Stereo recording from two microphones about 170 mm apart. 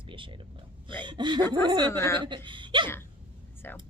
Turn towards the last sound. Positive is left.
turn(degrees=10)  # may be behind; listen again after turning